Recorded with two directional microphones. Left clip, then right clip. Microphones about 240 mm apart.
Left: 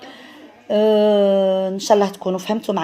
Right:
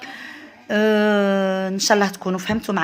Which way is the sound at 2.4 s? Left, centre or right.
Right.